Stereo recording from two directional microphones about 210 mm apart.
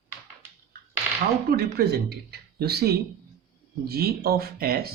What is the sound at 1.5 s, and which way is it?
Speech, 50° right (ahead or behind).